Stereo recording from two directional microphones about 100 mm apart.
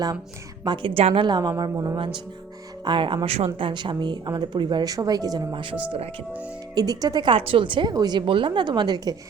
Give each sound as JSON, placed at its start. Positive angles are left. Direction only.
{"t": 0.6, "sound": "a woman's voice", "side_deg": -55}
{"t": 1.2, "sound": "speech", "side_deg": -45}
{"t": 2.8, "sound": "a woman's voice", "side_deg": -55}
{"t": 3.7, "sound": "speech", "side_deg": -50}
{"t": 6.7, "sound": "speech", "side_deg": -40}
{"t": 7.3, "sound": "speech", "side_deg": -60}